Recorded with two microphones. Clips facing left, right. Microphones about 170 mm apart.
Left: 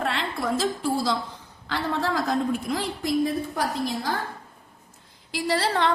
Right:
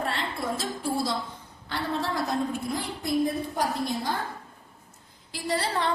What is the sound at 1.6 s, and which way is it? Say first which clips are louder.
Speech: left 3 dB; 90° left.